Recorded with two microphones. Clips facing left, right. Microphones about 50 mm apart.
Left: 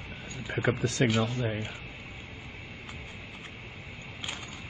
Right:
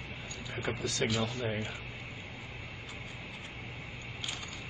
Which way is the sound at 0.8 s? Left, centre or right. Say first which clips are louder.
Left 5 dB; left.